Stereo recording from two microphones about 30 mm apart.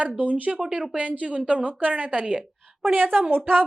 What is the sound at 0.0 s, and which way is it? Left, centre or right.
Speech, right.